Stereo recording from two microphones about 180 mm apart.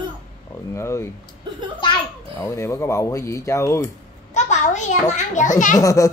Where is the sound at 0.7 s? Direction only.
15° left (ahead or behind).